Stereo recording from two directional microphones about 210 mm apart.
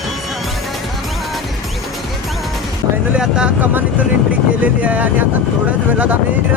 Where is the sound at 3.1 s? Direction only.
5° right (ahead or behind).